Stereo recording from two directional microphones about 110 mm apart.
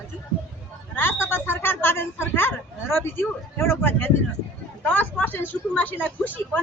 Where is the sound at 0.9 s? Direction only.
20° left (ahead or behind).